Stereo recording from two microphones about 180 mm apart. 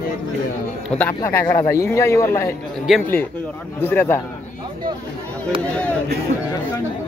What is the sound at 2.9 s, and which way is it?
Speech, 5° right (ahead or behind).